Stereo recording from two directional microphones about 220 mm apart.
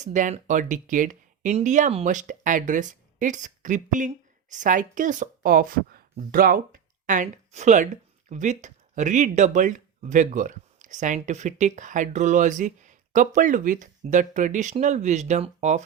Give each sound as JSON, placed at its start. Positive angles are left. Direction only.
{"t": 0.0, "sound": "speech", "side_deg": -35}